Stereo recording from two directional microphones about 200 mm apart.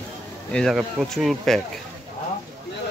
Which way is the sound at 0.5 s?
5° left (ahead or behind).